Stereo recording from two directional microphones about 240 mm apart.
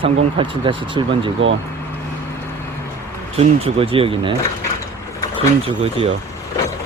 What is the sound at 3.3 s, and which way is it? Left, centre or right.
Speech, right.